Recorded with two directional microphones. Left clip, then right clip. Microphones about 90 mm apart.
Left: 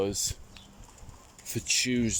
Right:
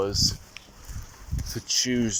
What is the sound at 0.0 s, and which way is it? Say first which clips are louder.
Speech: right 6 dB; 35° left (ahead or behind).